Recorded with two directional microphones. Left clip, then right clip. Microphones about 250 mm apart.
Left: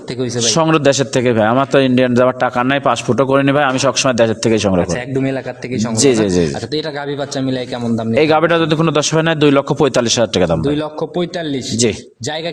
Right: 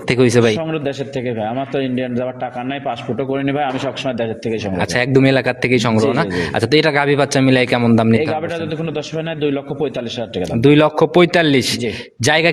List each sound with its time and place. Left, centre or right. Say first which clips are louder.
0.2 s a man's voice: right 4 dB; right
0.5 s a man's voice: left 9 dB; left
4.8 s a man's voice: right 3 dB; right
8.2 s a man's voice: left 8 dB; left
10.6 s a man's voice: right 7 dB; right